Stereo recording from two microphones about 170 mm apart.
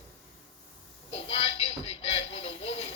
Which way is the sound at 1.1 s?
35° left (ahead or behind).